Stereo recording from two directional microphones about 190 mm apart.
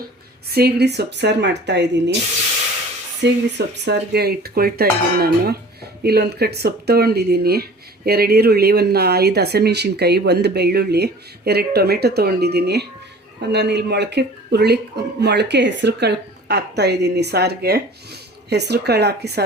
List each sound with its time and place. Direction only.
0.5 s speech: 55° right (ahead or behind)
3.8 s speech: 60° right (ahead or behind)